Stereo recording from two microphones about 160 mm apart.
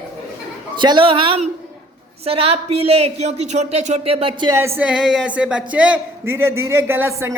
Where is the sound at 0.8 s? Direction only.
30° right (ahead or behind).